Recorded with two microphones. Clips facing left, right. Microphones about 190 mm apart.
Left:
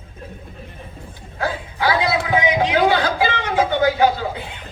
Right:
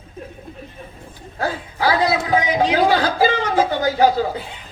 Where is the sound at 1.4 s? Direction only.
35° right (ahead or behind).